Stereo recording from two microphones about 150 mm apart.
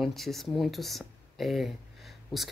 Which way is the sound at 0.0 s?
Centre (ahead or behind).